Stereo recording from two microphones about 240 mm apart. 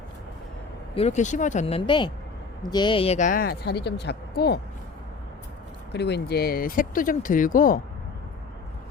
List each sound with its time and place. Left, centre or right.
0.9 s a woman's voice: left
5.9 s a woman's voice: left